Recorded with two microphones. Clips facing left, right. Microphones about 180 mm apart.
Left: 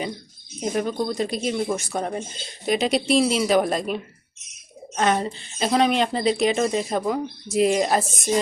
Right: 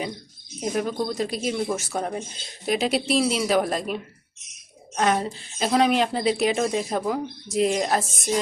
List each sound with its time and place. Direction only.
0.6 s a woman's voice: centre (ahead or behind)
4.9 s a woman's voice: centre (ahead or behind)